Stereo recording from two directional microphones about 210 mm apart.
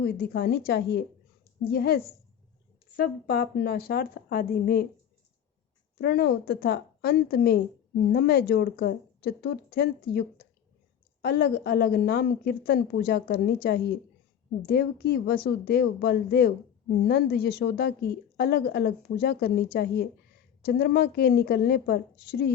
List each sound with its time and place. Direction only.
0.0 s a woman's voice: 50° left (ahead or behind)
6.0 s a woman's voice: 50° left (ahead or behind)